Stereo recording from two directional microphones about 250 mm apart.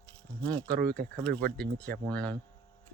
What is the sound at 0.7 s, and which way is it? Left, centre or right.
Speech, right.